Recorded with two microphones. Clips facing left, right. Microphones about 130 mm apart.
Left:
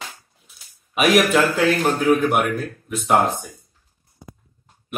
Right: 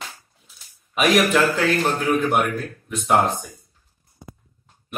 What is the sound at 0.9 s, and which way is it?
A man's voice, 5° left (ahead or behind).